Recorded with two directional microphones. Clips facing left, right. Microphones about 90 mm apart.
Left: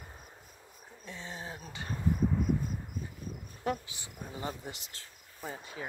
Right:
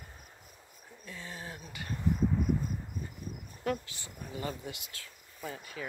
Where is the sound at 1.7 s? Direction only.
25° left (ahead or behind).